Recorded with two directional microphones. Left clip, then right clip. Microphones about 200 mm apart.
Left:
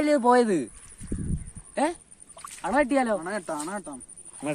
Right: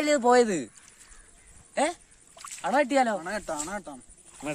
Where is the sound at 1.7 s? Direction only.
40° right (ahead or behind).